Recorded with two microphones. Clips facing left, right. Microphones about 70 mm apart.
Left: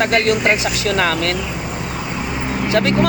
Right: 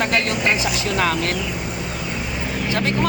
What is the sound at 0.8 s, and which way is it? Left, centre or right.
Speech, left.